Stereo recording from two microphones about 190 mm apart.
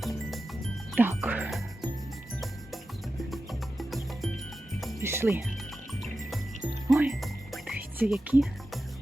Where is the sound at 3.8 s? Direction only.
Centre (ahead or behind).